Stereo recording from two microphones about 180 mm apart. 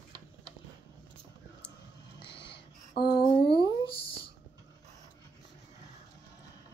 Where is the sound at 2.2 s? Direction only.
70° left (ahead or behind).